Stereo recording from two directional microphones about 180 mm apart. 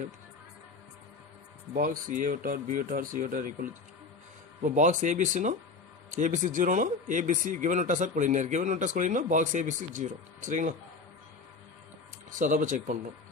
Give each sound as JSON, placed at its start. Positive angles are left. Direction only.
{"t": 1.7, "sound": "speech", "side_deg": -50}
{"t": 12.4, "sound": "speech", "side_deg": -45}